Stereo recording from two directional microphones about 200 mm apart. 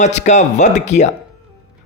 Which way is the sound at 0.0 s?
35° left (ahead or behind).